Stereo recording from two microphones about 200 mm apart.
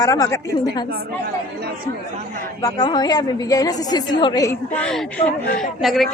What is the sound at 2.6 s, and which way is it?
A woman's voice, 20° left (ahead or behind).